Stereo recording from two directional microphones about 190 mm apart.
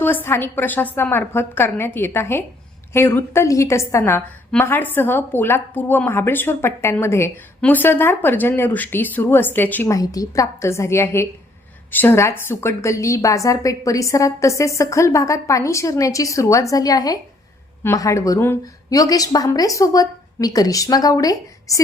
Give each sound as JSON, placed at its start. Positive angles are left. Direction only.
{"t": 0.0, "sound": "a woman's voice", "side_deg": 10}